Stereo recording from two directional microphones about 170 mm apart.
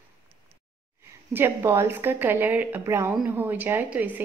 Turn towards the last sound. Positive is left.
turn(degrees=-10)  # may be behind; listen again after turning